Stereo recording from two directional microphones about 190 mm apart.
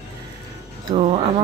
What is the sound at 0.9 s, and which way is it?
Speech, 35° right (ahead or behind).